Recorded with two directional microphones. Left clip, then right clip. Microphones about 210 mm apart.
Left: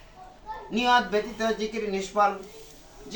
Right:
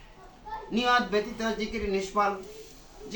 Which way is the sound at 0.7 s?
10° left (ahead or behind).